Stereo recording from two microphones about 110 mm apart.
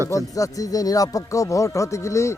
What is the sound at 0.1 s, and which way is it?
Speech, 30° left (ahead or behind).